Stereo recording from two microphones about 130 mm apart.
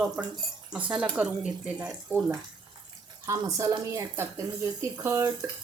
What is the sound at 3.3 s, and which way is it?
A woman's voice, 25° right (ahead or behind).